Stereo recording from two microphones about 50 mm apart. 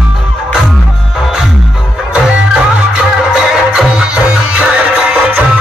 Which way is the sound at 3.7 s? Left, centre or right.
Centre.